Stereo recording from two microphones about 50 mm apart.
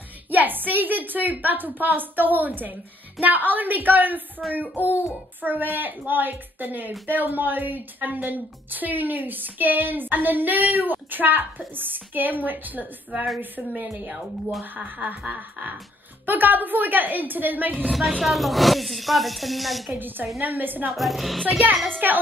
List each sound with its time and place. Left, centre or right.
0.3 s a woman's voice: right
18.2 s speech: centre
20.0 s a woman's voice: right
20.9 s speech: centre
21.8 s a woman's voice: right